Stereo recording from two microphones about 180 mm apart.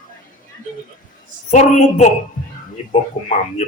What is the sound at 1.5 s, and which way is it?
Speech, 40° left (ahead or behind).